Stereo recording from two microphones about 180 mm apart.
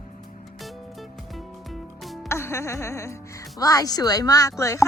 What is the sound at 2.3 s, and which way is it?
Music, 15° left (ahead or behind).